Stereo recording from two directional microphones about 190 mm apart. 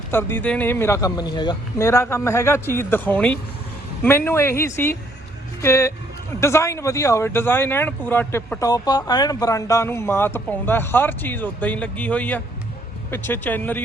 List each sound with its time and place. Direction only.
0.1 s speech: 10° left (ahead or behind)